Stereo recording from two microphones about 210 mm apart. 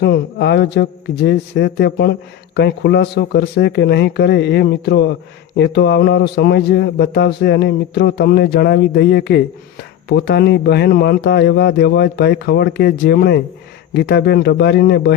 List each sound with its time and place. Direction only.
0.0 s a man's voice: 50° left (ahead or behind)